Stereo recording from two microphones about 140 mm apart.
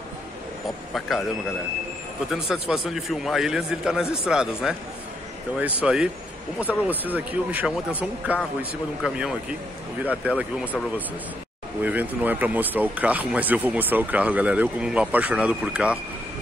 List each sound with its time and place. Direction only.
0.9 s a man's voice: centre (ahead or behind)
2.3 s a man's voice: 5° right (ahead or behind)
5.8 s a man's voice: 5° right (ahead or behind)
11.8 s speech: 10° right (ahead or behind)